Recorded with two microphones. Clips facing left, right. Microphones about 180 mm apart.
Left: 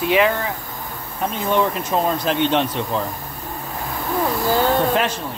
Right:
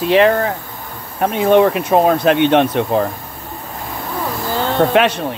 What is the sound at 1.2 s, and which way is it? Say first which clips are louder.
Speech: right 8 dB; 65° right (ahead or behind).